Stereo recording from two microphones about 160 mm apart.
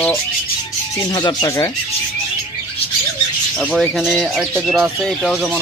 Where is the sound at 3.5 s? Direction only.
Centre (ahead or behind).